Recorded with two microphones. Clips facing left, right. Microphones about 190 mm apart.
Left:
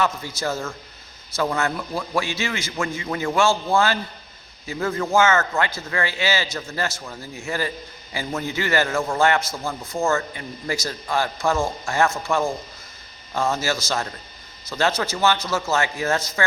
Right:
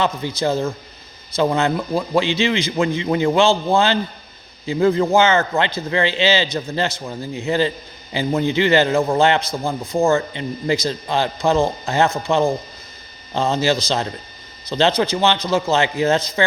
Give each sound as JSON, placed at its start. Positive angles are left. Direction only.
{"t": 0.0, "sound": "a man's voice", "side_deg": -20}